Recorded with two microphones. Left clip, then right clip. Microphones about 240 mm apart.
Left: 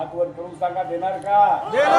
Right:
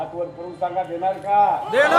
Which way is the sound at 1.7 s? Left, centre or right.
Right.